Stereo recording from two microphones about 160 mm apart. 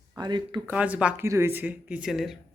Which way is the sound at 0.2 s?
30° right (ahead or behind).